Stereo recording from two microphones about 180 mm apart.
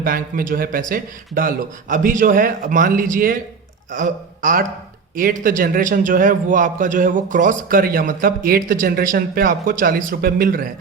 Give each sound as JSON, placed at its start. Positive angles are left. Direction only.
{"t": 0.0, "sound": "a man's voice", "side_deg": -50}